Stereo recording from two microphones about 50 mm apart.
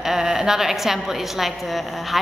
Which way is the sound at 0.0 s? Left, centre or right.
Centre.